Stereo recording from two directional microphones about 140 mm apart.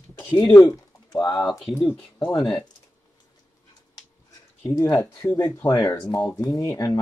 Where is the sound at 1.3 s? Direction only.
Centre (ahead or behind).